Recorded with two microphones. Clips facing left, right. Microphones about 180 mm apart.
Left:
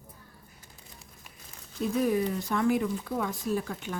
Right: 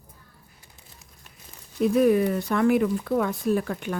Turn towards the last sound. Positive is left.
turn(degrees=-60)  # may be behind; listen again after turning